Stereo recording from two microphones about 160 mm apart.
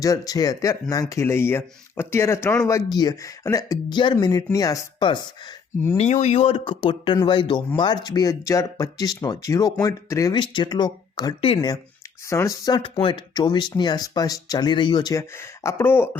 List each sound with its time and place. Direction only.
0.0 s speech: 20° left (ahead or behind)
6.0 s speech: 45° left (ahead or behind); by 16.0 s 15° left (ahead or behind)